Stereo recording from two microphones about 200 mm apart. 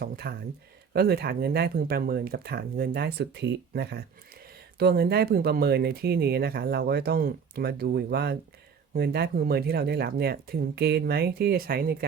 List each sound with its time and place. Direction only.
0.0 s speech: 50° right (ahead or behind)